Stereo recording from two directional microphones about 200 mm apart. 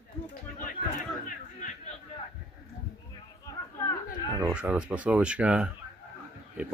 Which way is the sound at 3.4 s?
10° left (ahead or behind).